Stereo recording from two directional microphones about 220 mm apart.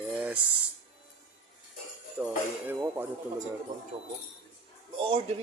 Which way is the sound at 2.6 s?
10° right (ahead or behind).